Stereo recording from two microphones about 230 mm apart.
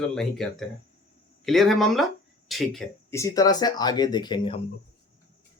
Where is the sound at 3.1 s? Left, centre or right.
Centre.